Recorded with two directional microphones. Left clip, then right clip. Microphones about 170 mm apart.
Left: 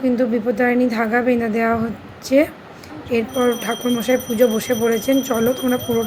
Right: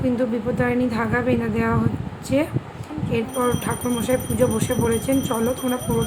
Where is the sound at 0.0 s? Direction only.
15° left (ahead or behind).